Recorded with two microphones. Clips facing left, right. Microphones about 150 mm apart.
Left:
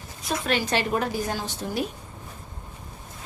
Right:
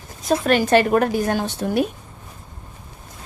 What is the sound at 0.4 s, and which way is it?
A woman's voice, 50° right (ahead or behind).